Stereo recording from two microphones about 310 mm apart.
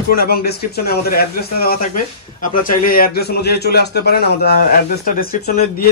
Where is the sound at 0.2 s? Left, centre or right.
Left.